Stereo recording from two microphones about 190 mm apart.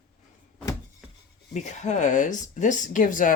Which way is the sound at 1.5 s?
40° left (ahead or behind).